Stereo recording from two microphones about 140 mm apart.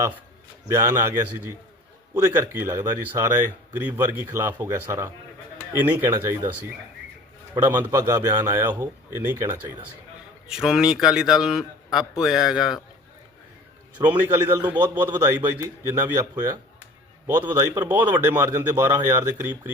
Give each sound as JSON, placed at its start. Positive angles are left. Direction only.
{"t": 0.7, "sound": "a man's voice", "side_deg": -20}
{"t": 7.5, "sound": "a man's voice", "side_deg": -20}
{"t": 10.5, "sound": "a man's voice", "side_deg": -5}
{"t": 14.0, "sound": "speech", "side_deg": -15}
{"t": 17.8, "sound": "speech", "side_deg": -15}